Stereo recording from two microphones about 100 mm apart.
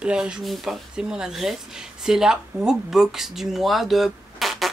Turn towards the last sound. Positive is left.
turn(degrees=0)  # may be behind; listen again after turning